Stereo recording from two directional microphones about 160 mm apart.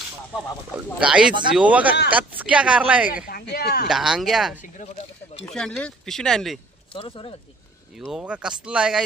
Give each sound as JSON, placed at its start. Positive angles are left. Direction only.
{"t": 0.9, "sound": "a woman's voice", "side_deg": -5}
{"t": 3.2, "sound": "speech", "side_deg": 75}
{"t": 3.8, "sound": "speech", "side_deg": -5}
{"t": 4.8, "sound": "stir", "side_deg": 45}
{"t": 5.5, "sound": "speech", "side_deg": 5}
{"t": 6.9, "sound": "speech", "side_deg": 35}
{"t": 7.9, "sound": "speech", "side_deg": 0}